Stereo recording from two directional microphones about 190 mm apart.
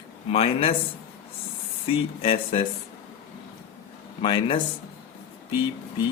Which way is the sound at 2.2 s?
30° left (ahead or behind).